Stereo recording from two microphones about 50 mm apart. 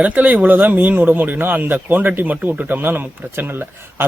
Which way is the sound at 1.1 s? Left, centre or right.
Right.